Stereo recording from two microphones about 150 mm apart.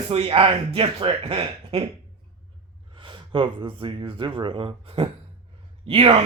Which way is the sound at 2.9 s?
35° right (ahead or behind).